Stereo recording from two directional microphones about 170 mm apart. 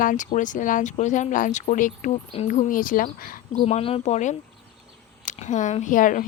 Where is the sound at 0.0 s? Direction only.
50° left (ahead or behind).